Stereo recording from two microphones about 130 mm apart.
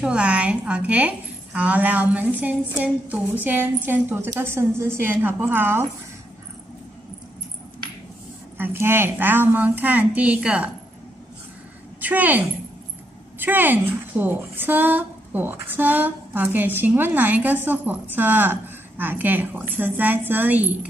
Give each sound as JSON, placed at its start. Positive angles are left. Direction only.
{"t": 0.0, "sound": "a woman's voice", "side_deg": -10}
{"t": 8.5, "sound": "a woman's voice", "side_deg": -15}
{"t": 12.0, "sound": "a woman's voice", "side_deg": -15}